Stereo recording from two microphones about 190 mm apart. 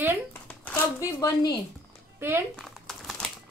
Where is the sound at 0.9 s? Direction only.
20° left (ahead or behind).